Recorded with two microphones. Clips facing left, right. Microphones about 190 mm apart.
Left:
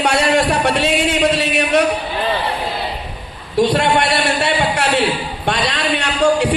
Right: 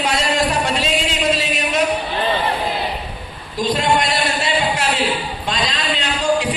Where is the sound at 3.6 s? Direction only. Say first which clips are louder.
Left 3 dB; 65° left (ahead or behind).